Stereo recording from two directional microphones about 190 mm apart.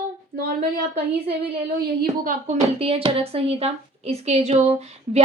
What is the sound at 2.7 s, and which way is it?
A woman's voice, 30° right (ahead or behind).